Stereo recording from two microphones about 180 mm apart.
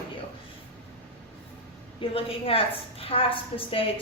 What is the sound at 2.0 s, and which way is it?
A woman's voice, 30° left (ahead or behind).